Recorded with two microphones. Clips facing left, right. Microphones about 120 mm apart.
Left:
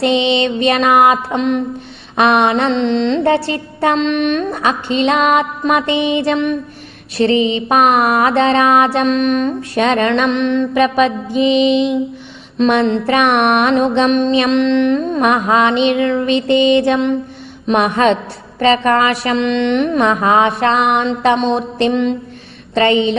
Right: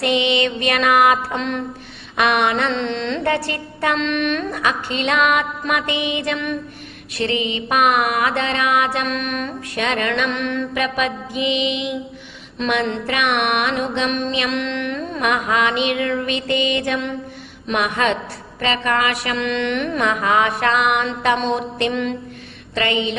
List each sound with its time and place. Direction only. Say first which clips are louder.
0.0 s music: left 4 dB; 25° left (ahead or behind)